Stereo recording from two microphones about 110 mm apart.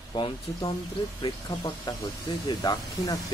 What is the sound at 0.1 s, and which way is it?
Speech, 40° left (ahead or behind).